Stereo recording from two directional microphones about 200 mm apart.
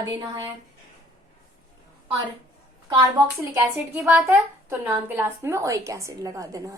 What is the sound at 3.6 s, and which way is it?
A woman's voice, 10° right (ahead or behind).